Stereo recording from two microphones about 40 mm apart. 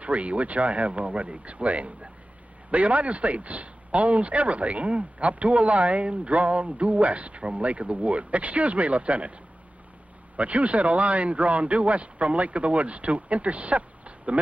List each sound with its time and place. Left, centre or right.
0.0 s speech: right
10.3 s speech: right